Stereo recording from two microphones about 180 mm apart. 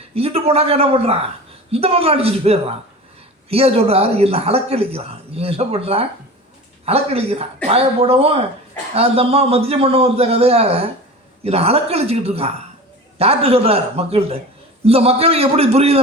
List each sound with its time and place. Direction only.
0.1 s speech: 35° right (ahead or behind)